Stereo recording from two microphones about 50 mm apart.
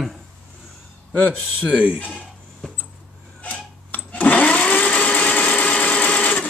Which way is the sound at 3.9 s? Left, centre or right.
Left.